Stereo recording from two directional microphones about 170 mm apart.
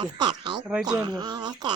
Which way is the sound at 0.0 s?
25° right (ahead or behind).